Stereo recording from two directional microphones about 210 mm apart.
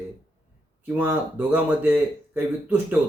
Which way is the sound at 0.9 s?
10° right (ahead or behind).